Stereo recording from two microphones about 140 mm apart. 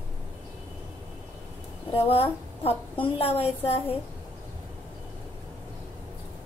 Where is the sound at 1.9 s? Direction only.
45° left (ahead or behind).